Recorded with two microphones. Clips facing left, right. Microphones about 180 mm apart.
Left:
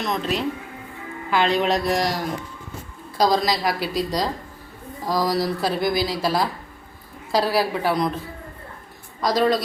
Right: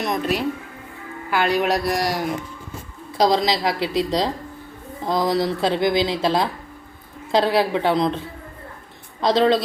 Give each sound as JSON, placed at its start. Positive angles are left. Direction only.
{"t": 0.0, "sound": "speech", "side_deg": -10}
{"t": 3.2, "sound": "speech", "side_deg": -20}
{"t": 9.2, "sound": "speech", "side_deg": -25}